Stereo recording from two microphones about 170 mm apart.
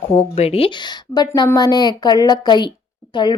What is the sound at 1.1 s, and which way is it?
Speech, 25° left (ahead or behind).